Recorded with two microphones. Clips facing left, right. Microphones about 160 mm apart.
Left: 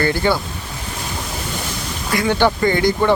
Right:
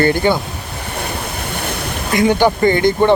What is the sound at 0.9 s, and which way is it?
Waves, 60° right (ahead or behind).